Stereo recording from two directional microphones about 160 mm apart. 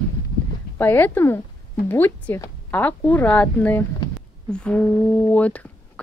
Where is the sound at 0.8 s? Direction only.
10° left (ahead or behind).